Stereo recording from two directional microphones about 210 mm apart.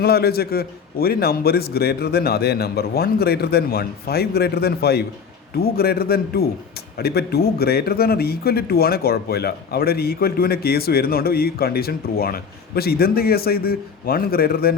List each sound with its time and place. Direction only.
0.0 s a man's voice: 50° left (ahead or behind)